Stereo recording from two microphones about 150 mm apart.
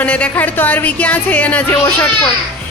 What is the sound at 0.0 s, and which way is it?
Speech, 10° left (ahead or behind).